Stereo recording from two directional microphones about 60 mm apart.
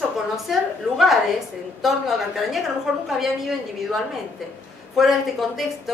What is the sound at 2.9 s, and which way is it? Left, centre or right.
Speech, centre.